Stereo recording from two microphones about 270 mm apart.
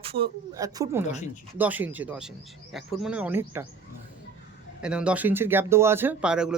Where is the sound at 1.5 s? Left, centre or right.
Centre.